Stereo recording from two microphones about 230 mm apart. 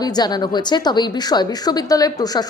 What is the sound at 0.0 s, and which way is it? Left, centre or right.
A woman's voice, centre.